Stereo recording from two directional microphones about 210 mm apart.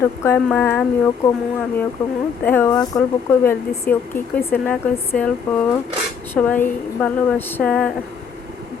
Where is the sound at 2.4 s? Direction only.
10° left (ahead or behind).